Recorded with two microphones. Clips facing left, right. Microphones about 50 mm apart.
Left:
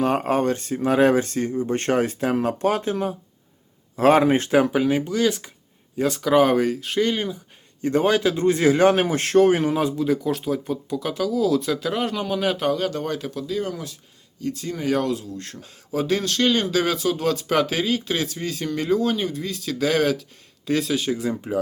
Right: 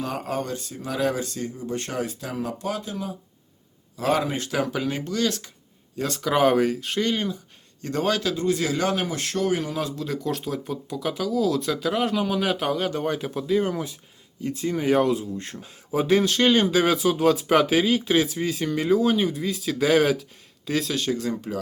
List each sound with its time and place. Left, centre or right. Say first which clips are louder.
0.0 s speech: left 8 dB; left
4.7 s speech: left 6 dB; centre
7.8 s a man's voice: left 5 dB; centre
8.4 s speech: left 6 dB; left; by 21.6 s centre